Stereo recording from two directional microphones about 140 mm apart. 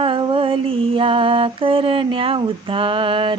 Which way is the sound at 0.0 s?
35° right (ahead or behind).